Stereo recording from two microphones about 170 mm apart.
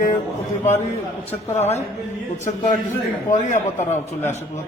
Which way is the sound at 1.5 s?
40° left (ahead or behind).